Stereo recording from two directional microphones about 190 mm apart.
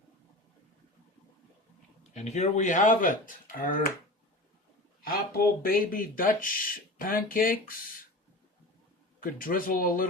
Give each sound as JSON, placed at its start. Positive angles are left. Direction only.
{"t": 2.1, "sound": "speech", "side_deg": 40}
{"t": 5.0, "sound": "speech", "side_deg": 50}
{"t": 9.2, "sound": "speech", "side_deg": 45}